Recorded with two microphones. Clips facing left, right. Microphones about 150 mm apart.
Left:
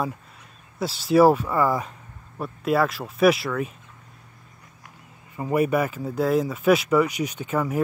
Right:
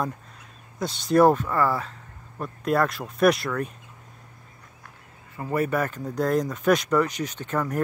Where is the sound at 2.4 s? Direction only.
5° left (ahead or behind).